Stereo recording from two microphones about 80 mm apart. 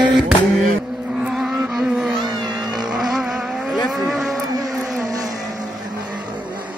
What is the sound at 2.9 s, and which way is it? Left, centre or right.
Vehicle, centre.